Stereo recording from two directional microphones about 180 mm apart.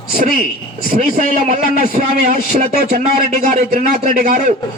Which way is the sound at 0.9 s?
40° right (ahead or behind).